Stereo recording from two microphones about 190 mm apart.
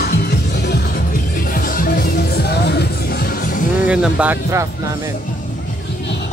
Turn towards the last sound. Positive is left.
turn(degrees=-10)  # may be behind; listen again after turning